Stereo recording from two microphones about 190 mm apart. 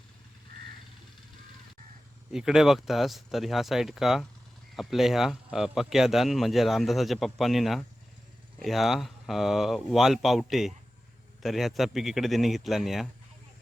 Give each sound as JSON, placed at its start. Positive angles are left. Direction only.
{"t": 2.3, "sound": "a man's voice", "side_deg": -5}